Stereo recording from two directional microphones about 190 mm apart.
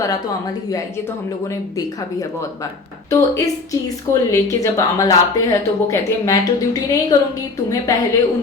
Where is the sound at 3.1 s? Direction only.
15° left (ahead or behind).